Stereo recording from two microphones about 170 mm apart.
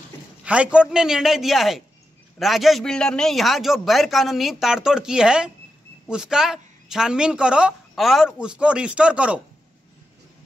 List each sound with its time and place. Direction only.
0.5 s speech: 5° right (ahead or behind)